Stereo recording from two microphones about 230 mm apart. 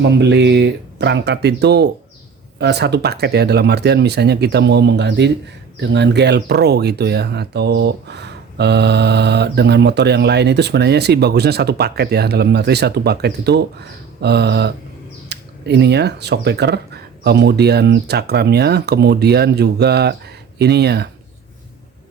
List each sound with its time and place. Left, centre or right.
0.0 s speech: right